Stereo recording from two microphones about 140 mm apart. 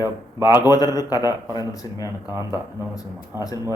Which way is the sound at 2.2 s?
20° right (ahead or behind).